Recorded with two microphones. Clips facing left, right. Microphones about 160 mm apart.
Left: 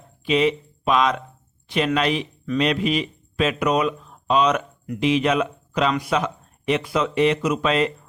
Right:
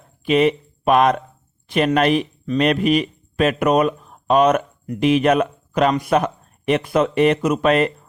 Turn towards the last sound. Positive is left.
turn(degrees=-55)  # may be behind; listen again after turning